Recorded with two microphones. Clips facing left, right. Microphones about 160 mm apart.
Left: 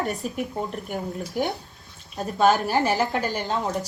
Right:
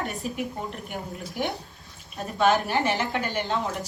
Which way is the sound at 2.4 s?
40° left (ahead or behind).